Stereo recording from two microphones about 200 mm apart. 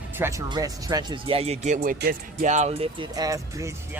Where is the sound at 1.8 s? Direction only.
50° right (ahead or behind); by 3.1 s 30° right (ahead or behind).